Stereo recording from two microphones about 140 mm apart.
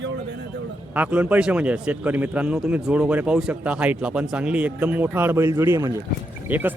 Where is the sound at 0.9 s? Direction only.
10° right (ahead or behind).